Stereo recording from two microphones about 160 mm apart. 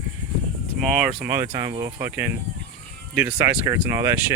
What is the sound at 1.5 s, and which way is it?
Speech, 25° right (ahead or behind).